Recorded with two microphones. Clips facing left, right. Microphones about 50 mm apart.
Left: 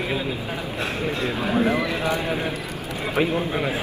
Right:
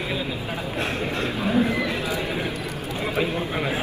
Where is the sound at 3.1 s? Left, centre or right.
Left.